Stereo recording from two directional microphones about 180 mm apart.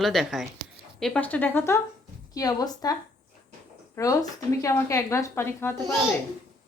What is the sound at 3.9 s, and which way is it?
A woman's voice, 20° left (ahead or behind).